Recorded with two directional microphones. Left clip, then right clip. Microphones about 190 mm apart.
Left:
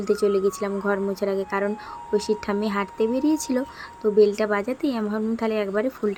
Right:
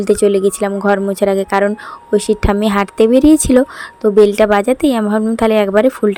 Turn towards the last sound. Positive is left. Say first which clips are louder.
# right 13 dB
turn(degrees=-45)  # may be behind; listen again after turning